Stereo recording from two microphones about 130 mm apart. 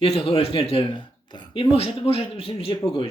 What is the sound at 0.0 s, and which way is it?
A man's voice, 45° left (ahead or behind).